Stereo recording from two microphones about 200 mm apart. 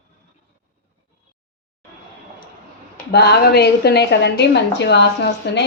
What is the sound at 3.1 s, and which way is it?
A woman's voice, 55° left (ahead or behind).